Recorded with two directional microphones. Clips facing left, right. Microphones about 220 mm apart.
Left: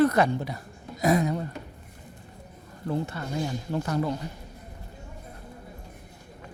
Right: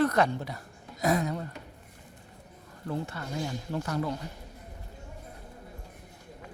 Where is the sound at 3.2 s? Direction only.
20° left (ahead or behind).